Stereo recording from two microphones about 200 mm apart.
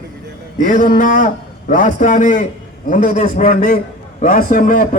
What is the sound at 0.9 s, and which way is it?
A man's voice, 40° left (ahead or behind).